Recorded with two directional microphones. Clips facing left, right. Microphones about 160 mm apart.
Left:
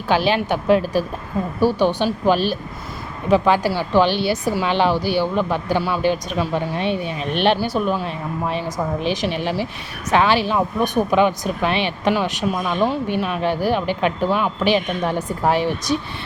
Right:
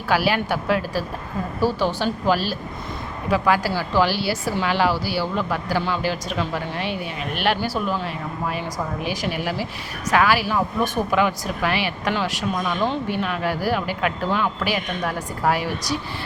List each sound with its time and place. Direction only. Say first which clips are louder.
0.1 s speech: left 3 dB; 20° left (ahead or behind)